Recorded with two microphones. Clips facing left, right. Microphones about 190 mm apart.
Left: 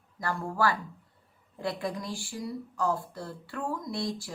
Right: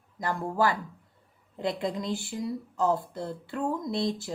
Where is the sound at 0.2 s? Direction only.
20° right (ahead or behind).